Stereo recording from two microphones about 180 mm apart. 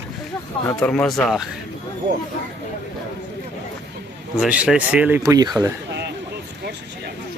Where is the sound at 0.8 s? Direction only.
5° left (ahead or behind).